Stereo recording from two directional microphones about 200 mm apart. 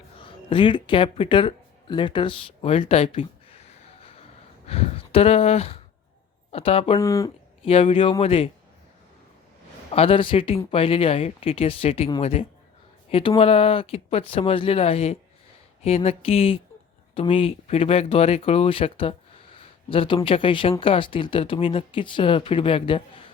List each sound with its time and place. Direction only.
0.2 s a sound: 25° left (ahead or behind)
6.5 s speech: 30° left (ahead or behind)
7.0 s speech: 15° left (ahead or behind)
7.6 s speech: 30° left (ahead or behind)
9.9 s speech: 30° left (ahead or behind)